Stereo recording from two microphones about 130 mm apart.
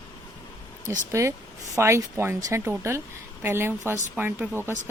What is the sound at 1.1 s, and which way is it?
Speech, 20° right (ahead or behind).